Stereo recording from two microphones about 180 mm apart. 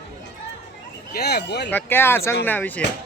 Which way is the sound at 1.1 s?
65° left (ahead or behind).